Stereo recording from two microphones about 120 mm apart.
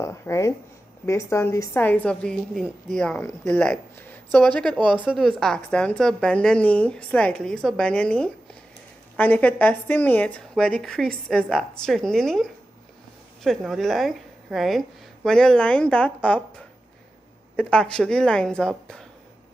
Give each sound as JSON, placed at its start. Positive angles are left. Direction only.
{"t": 0.0, "sound": "a woman's voice", "side_deg": 25}
{"t": 4.9, "sound": "a woman's voice", "side_deg": -5}